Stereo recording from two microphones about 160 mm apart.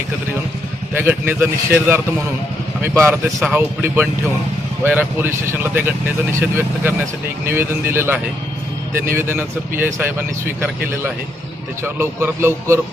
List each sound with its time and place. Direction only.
0.9 s speech: 15° right (ahead or behind)
7.4 s speech: 15° right (ahead or behind)